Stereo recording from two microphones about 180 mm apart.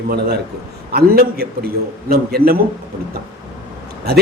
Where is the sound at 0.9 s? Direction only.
60° right (ahead or behind).